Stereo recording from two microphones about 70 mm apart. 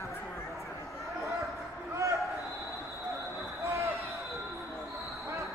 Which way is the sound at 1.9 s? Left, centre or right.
Right.